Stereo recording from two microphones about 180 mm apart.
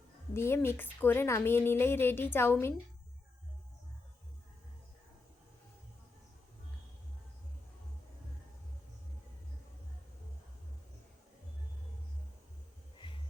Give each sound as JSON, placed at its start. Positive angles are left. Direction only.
{"t": 0.3, "sound": "a woman's voice", "side_deg": 15}
{"t": 13.0, "sound": "music", "side_deg": 25}